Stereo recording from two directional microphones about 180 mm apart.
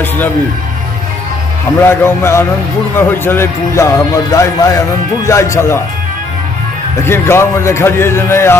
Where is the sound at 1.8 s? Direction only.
15° left (ahead or behind).